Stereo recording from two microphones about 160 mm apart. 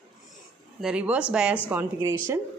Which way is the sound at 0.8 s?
5° right (ahead or behind).